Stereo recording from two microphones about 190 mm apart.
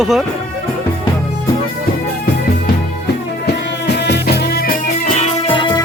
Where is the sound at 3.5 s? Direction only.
60° left (ahead or behind).